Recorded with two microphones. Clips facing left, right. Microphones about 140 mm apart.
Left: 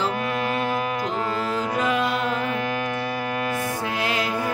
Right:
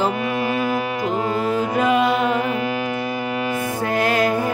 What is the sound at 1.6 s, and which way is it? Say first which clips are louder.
Music: right 5 dB; 55° right (ahead or behind).